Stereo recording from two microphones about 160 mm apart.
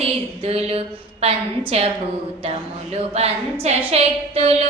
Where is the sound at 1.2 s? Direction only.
40° right (ahead or behind).